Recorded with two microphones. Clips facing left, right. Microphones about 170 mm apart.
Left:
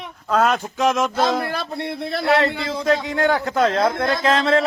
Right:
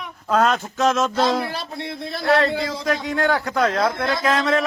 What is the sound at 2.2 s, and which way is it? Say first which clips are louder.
A man's voice: right 1 dB; 20° left (ahead or behind).